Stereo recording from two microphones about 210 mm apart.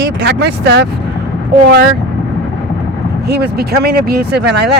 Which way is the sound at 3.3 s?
50° right (ahead or behind).